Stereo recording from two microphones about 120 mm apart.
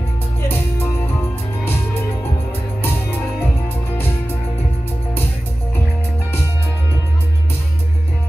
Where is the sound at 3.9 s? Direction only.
20° left (ahead or behind).